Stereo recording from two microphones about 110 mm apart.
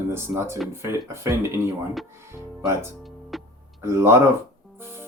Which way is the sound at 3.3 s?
Centre (ahead or behind).